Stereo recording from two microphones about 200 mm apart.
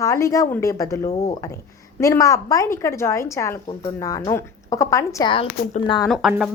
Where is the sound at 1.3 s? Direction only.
15° left (ahead or behind).